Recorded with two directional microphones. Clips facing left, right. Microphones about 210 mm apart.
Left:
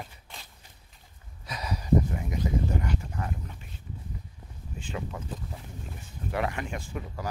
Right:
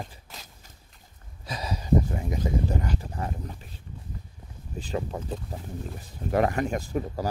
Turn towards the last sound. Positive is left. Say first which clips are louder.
# right 7 dB
turn(degrees=-40)  # may be behind; listen again after turning